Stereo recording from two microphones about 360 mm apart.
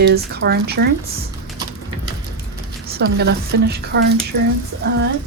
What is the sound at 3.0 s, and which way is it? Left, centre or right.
Speech, right.